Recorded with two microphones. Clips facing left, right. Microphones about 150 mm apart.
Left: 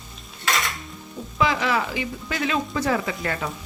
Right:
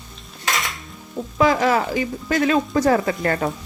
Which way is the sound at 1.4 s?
45° right (ahead or behind).